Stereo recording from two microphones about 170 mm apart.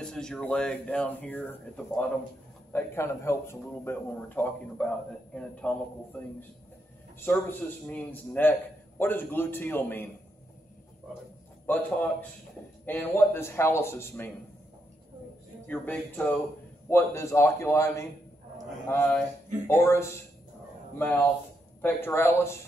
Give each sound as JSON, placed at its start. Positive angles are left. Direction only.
{"t": 0.0, "sound": "a man's voice", "side_deg": 5}
{"t": 11.6, "sound": "a man's voice", "side_deg": 10}
{"t": 15.6, "sound": "a man's voice", "side_deg": 10}
{"t": 21.8, "sound": "a man's voice", "side_deg": 15}